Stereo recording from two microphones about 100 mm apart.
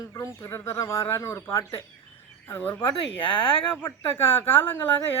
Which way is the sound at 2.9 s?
60° left (ahead or behind).